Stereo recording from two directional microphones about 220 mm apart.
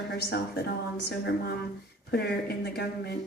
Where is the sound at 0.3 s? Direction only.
50° left (ahead or behind).